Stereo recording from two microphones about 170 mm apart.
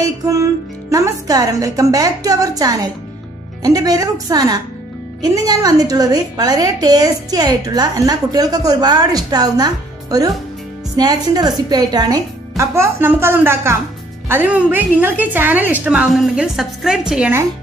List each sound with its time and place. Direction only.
0.0 s a woman's voice: 20° right (ahead or behind)